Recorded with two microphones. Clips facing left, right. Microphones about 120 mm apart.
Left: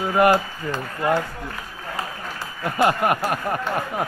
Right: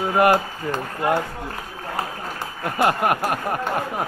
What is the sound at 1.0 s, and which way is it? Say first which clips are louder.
Speech: even; 15° right (ahead or behind).